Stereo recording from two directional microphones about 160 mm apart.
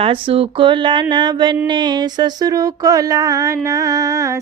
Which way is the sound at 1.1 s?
30° right (ahead or behind).